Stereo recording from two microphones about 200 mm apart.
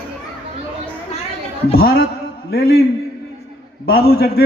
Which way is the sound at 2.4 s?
50° left (ahead or behind).